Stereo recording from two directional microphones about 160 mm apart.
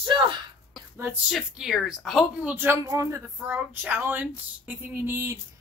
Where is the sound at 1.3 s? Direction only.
5° right (ahead or behind).